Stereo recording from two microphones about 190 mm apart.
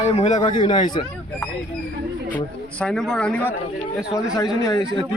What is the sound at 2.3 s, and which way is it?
Speech, 5° left (ahead or behind).